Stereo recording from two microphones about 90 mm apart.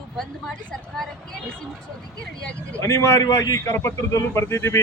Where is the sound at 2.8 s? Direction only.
30° left (ahead or behind).